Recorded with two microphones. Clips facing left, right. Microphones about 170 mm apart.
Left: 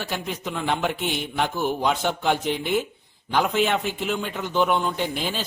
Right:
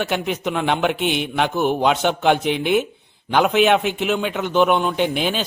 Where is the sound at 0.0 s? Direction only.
70° right (ahead or behind).